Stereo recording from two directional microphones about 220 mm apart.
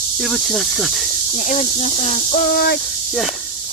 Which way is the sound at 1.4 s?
30° left (ahead or behind).